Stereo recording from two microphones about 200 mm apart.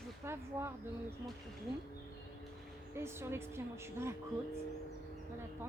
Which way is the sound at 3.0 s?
10° right (ahead or behind).